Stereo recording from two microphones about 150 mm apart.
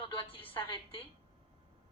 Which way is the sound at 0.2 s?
35° left (ahead or behind).